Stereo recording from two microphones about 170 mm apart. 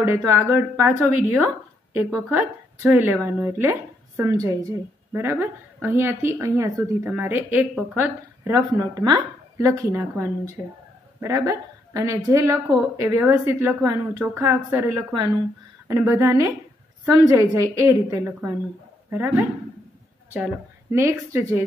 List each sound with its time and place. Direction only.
0.0 s a woman's voice: 15° right (ahead or behind)